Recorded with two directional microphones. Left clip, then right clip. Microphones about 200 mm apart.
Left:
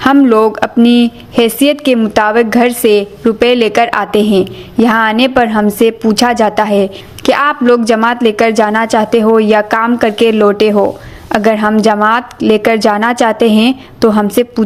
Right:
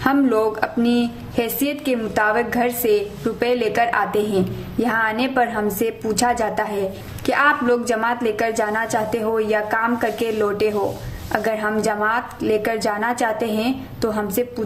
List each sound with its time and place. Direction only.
0.0 s a woman's voice: 40° left (ahead or behind)